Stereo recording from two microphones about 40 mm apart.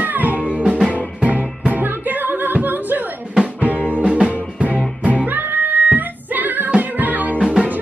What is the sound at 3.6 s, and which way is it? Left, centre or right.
Music, right.